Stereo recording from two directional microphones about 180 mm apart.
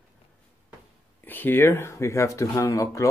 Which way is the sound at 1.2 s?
10° left (ahead or behind).